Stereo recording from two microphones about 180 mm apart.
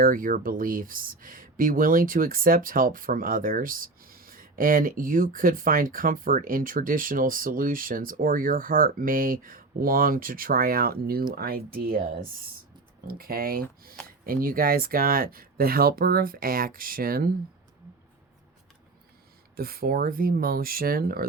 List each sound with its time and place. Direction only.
0.0 s speech: 50° right (ahead or behind)
13.1 s speech: 55° right (ahead or behind)
19.5 s speech: 55° right (ahead or behind)